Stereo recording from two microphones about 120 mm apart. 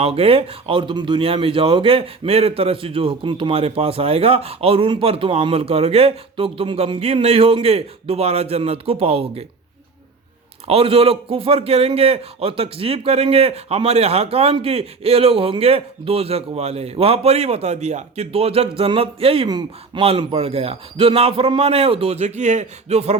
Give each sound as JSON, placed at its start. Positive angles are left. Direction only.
{"t": 0.0, "sound": "speech", "side_deg": -50}
{"t": 10.7, "sound": "a man's voice", "side_deg": -55}
{"t": 19.5, "sound": "speech", "side_deg": -35}
{"t": 20.0, "sound": "a man's voice", "side_deg": -55}